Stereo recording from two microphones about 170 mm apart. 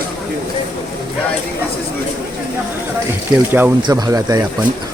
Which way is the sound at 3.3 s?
20° right (ahead or behind).